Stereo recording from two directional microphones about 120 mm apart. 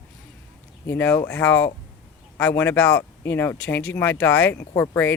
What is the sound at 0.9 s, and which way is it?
Speech, 15° left (ahead or behind).